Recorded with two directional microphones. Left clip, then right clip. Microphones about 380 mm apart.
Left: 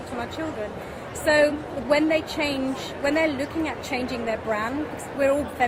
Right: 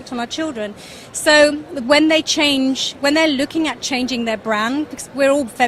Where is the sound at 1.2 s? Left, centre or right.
Right.